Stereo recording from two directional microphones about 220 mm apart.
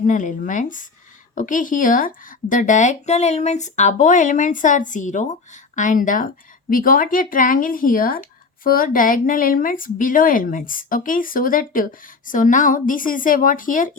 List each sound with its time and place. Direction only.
0.0 s speech: 35° left (ahead or behind)